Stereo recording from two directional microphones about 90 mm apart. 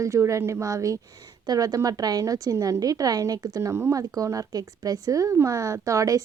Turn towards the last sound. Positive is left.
turn(degrees=-35)  # may be behind; listen again after turning